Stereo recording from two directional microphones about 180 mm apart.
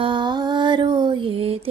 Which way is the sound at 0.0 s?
25° right (ahead or behind).